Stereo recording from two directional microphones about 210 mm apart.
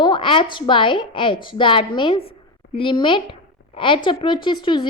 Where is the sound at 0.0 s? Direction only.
25° left (ahead or behind).